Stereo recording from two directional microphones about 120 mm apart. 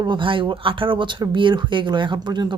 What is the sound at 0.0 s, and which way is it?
Speech, 40° right (ahead or behind).